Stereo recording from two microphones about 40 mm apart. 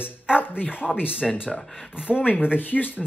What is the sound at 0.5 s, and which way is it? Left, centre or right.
Speech, left.